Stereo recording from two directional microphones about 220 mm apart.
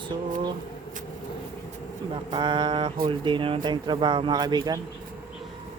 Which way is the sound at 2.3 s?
20° right (ahead or behind).